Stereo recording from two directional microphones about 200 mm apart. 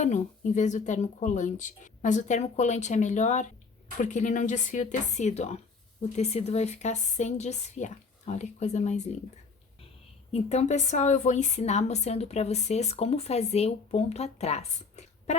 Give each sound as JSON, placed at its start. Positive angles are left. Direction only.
{"t": 0.0, "sound": "a woman's voice", "side_deg": 35}
{"t": 10.3, "sound": "a woman's voice", "side_deg": 35}